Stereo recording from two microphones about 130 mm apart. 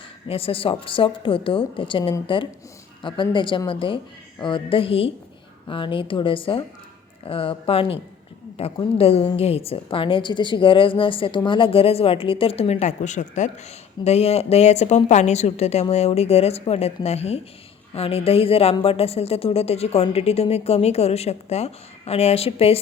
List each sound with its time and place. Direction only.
0.3 s a woman's voice: 45° left (ahead or behind); by 13.5 s 65° left (ahead or behind)
14.0 s a woman's voice: 55° left (ahead or behind)